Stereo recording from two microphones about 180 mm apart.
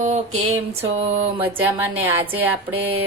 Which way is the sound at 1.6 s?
10° right (ahead or behind).